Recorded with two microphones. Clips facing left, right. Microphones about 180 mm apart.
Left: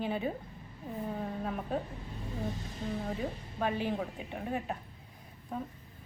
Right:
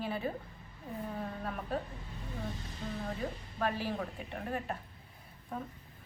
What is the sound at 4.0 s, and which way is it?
Speech, 10° left (ahead or behind).